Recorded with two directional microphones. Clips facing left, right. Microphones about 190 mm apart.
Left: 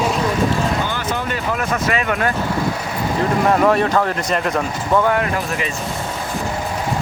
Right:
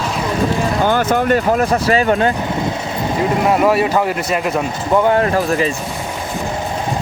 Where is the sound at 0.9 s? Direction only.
50° right (ahead or behind); by 2.3 s 30° right (ahead or behind).